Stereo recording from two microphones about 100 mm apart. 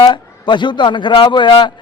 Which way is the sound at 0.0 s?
50° left (ahead or behind).